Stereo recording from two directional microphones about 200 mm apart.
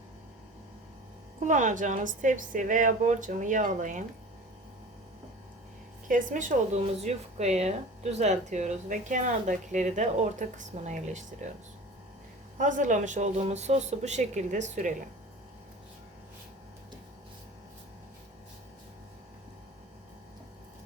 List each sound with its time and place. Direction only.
1.4 s speech: 40° right (ahead or behind)
6.1 s speech: 40° right (ahead or behind)